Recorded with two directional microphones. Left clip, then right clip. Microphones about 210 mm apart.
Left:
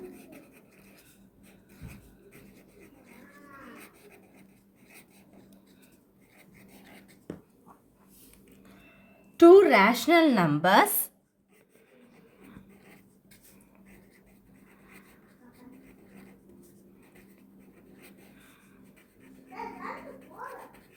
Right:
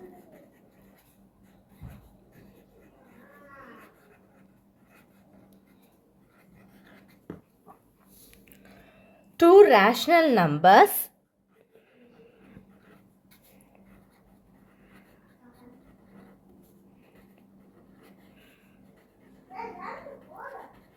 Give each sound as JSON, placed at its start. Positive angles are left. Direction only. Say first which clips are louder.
{"t": 9.4, "sound": "speech", "louder": "right 1 dB", "side_deg": -30}